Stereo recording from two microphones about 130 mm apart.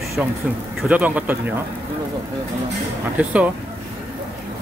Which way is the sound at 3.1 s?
10° right (ahead or behind).